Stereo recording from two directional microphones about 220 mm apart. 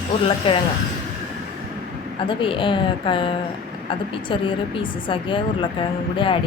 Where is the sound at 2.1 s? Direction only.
25° left (ahead or behind).